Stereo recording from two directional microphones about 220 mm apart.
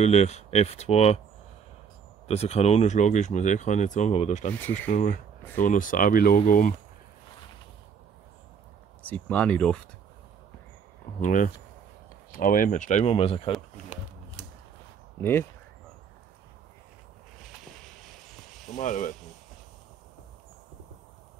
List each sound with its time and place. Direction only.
0.0 s speech: 30° left (ahead or behind)
2.2 s speech: 30° left (ahead or behind)
9.1 s speech: 5° left (ahead or behind)
11.1 s speech: 35° left (ahead or behind)
18.8 s speech: 35° left (ahead or behind)